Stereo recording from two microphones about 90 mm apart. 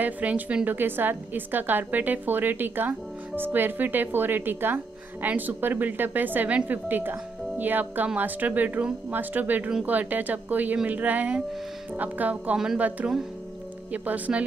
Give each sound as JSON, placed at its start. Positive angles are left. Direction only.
{"t": 0.0, "sound": "a woman's voice", "side_deg": -15}